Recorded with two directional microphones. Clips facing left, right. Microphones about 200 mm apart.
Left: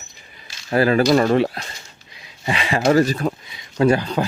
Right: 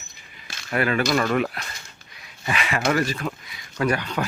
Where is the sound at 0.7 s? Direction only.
35° left (ahead or behind).